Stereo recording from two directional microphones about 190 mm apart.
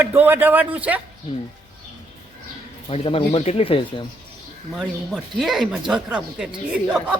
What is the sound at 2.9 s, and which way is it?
Speech, 30° left (ahead or behind).